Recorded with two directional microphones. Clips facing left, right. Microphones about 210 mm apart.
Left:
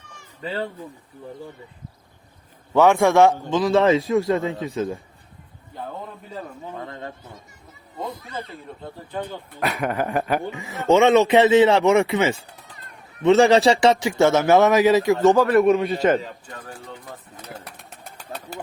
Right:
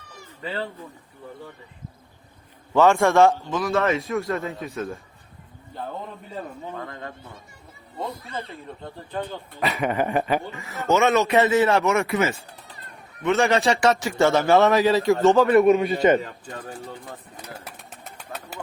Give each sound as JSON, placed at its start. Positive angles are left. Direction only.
{"t": 2.7, "sound": "a man's voice", "side_deg": 15}
{"t": 3.5, "sound": "a man's voice", "side_deg": 30}
{"t": 6.7, "sound": "a man's voice", "side_deg": 25}
{"t": 8.4, "sound": "a man's voice", "side_deg": 5}
{"t": 9.6, "sound": "a sound", "side_deg": 0}
{"t": 10.4, "sound": "a man's voice", "side_deg": 15}
{"t": 10.8, "sound": "a man's voice", "side_deg": 30}
{"t": 13.8, "sound": "a man's voice", "side_deg": 15}
{"t": 15.4, "sound": "a sound", "side_deg": 0}
{"t": 17.3, "sound": "pigeon", "side_deg": -10}